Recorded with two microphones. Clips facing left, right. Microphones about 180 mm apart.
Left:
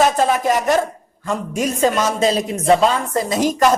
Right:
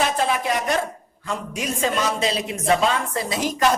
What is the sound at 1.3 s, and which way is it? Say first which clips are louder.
Speech: left 6 dB; 45° left (ahead or behind).